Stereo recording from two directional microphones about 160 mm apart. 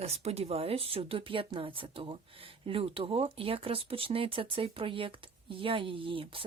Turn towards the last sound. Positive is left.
turn(degrees=-35)  # may be behind; listen again after turning